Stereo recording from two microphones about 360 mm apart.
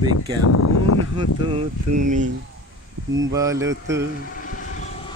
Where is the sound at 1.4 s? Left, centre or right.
Centre.